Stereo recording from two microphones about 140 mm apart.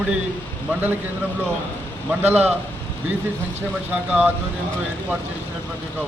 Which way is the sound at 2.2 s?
15° right (ahead or behind).